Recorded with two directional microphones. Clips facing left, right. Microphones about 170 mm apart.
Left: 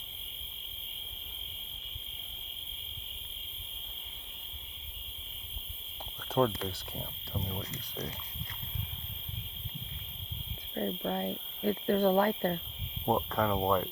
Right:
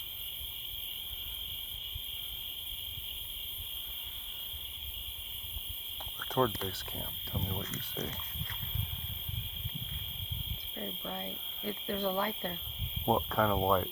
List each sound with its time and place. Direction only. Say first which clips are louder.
6.4 s speech: left 2 dB; 10° left (ahead or behind)
10.8 s speech: left 8 dB; 50° left (ahead or behind)
13.1 s speech: even; centre (ahead or behind)